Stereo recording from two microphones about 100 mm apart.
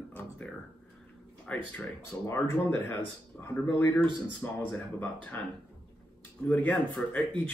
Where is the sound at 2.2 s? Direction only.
25° left (ahead or behind).